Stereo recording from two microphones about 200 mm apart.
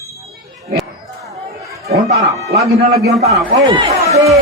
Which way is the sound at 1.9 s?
50° right (ahead or behind).